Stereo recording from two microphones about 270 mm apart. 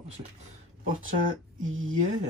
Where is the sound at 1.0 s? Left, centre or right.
Right.